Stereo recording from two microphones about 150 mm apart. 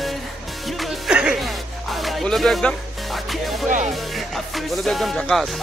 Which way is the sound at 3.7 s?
55° right (ahead or behind).